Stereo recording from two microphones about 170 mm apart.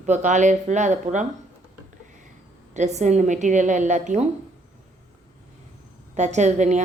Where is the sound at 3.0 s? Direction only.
45° right (ahead or behind).